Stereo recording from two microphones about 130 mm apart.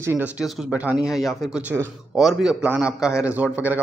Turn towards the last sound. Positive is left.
turn(degrees=-15)  # may be behind; listen again after turning